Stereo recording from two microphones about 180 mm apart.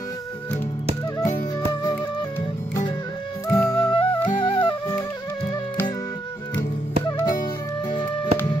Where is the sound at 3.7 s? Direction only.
25° left (ahead or behind).